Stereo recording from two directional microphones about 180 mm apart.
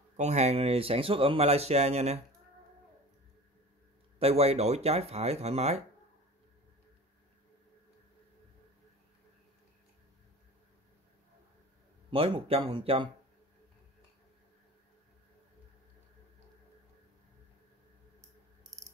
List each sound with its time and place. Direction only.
0.2 s speech: 40° right (ahead or behind)
4.2 s speech: 35° right (ahead or behind)
12.1 s speech: 30° right (ahead or behind)
18.6 s mechanisms: 20° right (ahead or behind)